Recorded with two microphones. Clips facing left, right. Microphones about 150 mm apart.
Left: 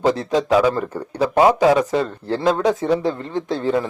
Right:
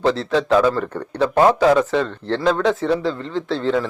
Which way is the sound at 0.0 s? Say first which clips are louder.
Even; 15° left (ahead or behind).